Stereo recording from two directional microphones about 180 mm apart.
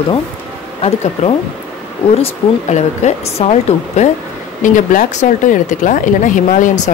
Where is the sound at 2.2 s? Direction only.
40° left (ahead or behind).